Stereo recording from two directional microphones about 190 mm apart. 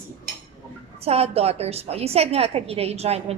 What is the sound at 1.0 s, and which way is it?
A woman's voice, 30° right (ahead or behind).